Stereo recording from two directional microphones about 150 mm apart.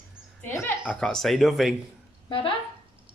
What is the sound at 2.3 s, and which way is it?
Speech, 35° left (ahead or behind).